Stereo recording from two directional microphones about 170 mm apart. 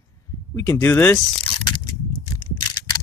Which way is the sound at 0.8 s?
10° left (ahead or behind).